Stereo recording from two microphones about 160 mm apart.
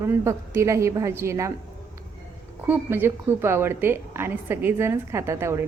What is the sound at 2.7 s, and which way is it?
A woman's voice, 15° right (ahead or behind).